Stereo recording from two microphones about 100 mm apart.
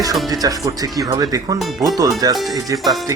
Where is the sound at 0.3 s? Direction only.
35° right (ahead or behind).